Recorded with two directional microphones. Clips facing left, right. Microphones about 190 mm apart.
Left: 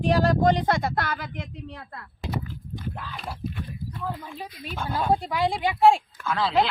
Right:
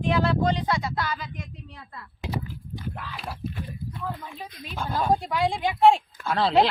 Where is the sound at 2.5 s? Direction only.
Centre (ahead or behind).